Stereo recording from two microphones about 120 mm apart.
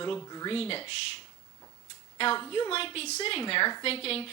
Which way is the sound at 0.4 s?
55° left (ahead or behind).